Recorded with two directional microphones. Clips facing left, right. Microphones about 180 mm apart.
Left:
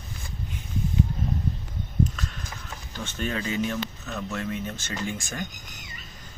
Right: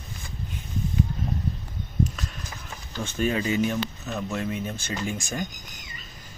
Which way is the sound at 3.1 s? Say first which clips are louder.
Right 4 dB; 10° right (ahead or behind).